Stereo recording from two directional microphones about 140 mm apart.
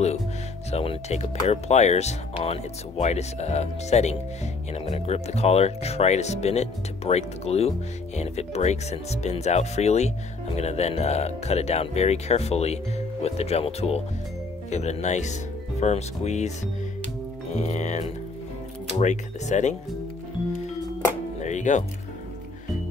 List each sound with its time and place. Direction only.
0.7 s speech: 50° left (ahead or behind)
21.4 s music: 60° left (ahead or behind)